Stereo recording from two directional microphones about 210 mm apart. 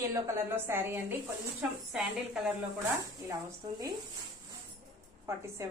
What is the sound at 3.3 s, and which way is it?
Speech, 15° right (ahead or behind).